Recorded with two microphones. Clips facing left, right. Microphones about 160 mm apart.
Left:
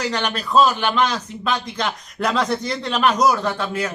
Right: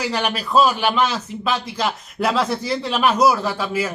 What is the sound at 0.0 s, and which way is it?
A man's voice, 5° right (ahead or behind).